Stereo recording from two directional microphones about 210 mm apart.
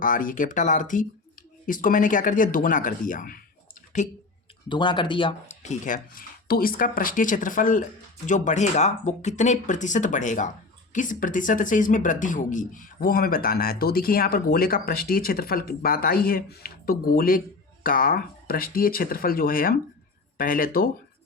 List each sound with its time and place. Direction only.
0.0 s speech: 40° left (ahead or behind)
4.7 s speech: 25° left (ahead or behind); by 20.9 s 40° left (ahead or behind)